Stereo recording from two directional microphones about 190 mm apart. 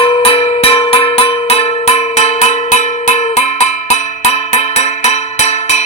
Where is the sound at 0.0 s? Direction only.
30° left (ahead or behind).